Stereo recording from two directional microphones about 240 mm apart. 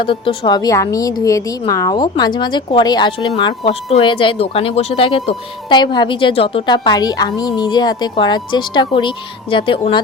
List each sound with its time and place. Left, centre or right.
0.0 s speech: left